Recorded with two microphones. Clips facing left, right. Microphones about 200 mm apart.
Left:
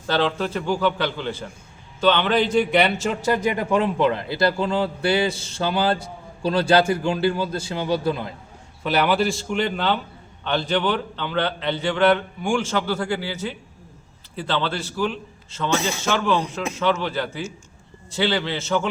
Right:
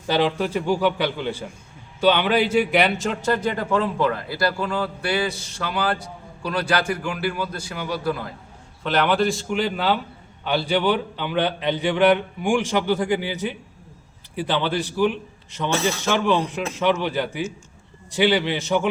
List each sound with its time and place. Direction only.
0.1 s a man's voice: 10° right (ahead or behind); by 8.3 s 25° left (ahead or behind)
8.8 s a man's voice: 5° left (ahead or behind); by 18.9 s 15° right (ahead or behind)